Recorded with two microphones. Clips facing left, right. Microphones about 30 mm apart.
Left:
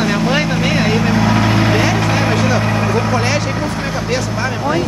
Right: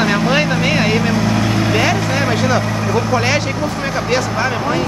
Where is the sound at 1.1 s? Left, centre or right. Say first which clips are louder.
Left 2 dB; left.